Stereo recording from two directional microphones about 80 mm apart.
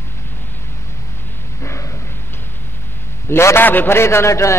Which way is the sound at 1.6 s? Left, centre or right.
Left.